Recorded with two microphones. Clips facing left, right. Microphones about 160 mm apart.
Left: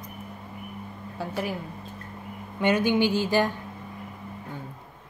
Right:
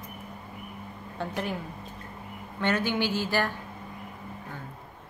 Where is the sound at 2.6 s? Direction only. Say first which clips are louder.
Left 5 dB; 15° left (ahead or behind).